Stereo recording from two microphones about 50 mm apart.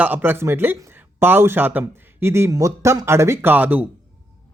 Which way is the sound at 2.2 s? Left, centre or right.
Right.